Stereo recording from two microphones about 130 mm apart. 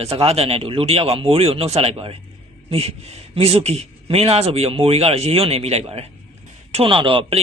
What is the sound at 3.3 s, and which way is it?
A man's voice, 50° right (ahead or behind).